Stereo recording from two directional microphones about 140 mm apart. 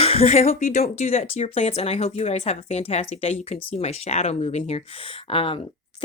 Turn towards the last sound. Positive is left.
turn(degrees=40)  # may be behind; listen again after turning